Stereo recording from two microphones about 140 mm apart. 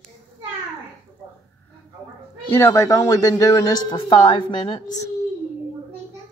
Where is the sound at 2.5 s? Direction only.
20° left (ahead or behind); by 5.0 s 35° left (ahead or behind).